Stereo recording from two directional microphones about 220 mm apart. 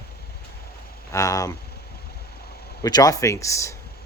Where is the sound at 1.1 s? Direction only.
15° left (ahead or behind).